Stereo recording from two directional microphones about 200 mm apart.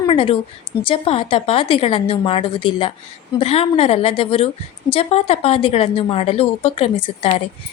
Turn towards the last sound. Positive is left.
turn(degrees=30)  # may be behind; listen again after turning